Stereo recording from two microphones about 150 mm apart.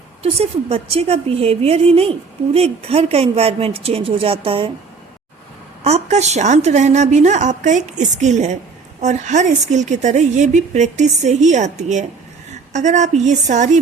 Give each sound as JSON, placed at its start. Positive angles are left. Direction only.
{"t": 0.2, "sound": "a woman's voice", "side_deg": -40}
{"t": 5.8, "sound": "a woman's voice", "side_deg": -45}